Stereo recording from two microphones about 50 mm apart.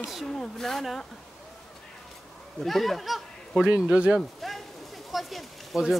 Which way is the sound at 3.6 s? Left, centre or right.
Centre.